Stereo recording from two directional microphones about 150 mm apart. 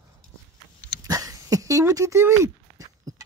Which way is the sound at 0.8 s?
25° right (ahead or behind).